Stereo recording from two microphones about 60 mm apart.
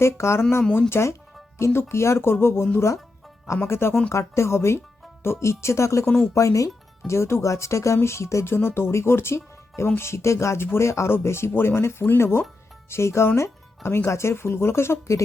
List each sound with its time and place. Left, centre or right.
0.0 s speech: left
7.1 s speech: left